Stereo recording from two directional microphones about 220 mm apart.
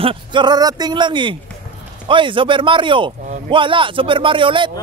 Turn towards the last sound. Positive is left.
turn(degrees=-20)  # may be behind; listen again after turning